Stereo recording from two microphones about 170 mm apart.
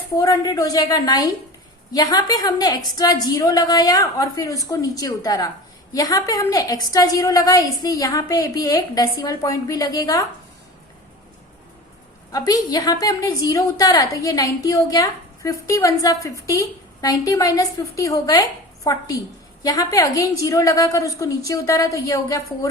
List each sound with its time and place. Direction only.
0.2 s a woman's voice: 20° left (ahead or behind)
12.3 s a woman's voice: 20° left (ahead or behind)
19.6 s a woman's voice: 20° left (ahead or behind)